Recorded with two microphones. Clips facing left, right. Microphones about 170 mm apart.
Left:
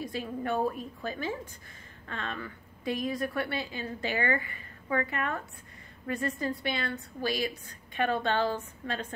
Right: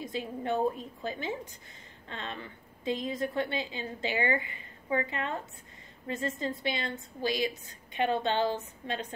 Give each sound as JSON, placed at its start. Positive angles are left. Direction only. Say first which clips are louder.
{"t": 0.0, "sound": "a woman's voice", "louder": "left 1 dB", "side_deg": -20}